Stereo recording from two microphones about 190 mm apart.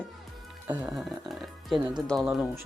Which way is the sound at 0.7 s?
10° right (ahead or behind).